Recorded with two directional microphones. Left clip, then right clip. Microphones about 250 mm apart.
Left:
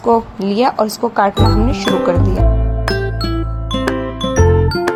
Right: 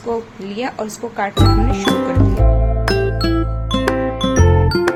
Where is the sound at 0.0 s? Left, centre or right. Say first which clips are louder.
Left 9 dB; left.